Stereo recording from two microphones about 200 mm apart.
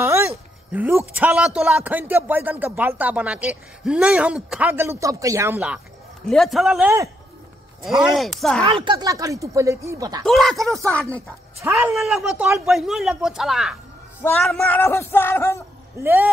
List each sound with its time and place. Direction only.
0.0 s a sound: 15° right (ahead or behind)
0.7 s a man's voice: 10° right (ahead or behind)
8.1 s speech: centre (ahead or behind)
8.8 s a man's voice: 20° right (ahead or behind)
10.2 s speech: centre (ahead or behind)
10.9 s music: 5° left (ahead or behind)
11.2 s speech: 10° right (ahead or behind)
14.8 s music: 10° left (ahead or behind)
16.0 s a man's voice: 10° right (ahead or behind)